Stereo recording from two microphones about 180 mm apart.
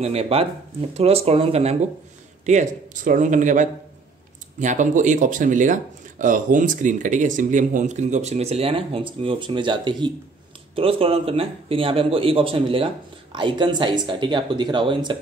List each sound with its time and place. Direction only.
0.0 s a man's voice: 35° right (ahead or behind)